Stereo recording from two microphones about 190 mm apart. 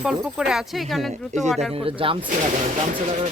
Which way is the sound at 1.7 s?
30° right (ahead or behind).